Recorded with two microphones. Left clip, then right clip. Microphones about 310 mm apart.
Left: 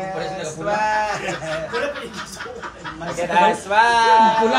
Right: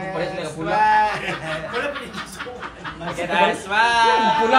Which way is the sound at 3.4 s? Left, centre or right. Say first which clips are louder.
Left 3 dB; left.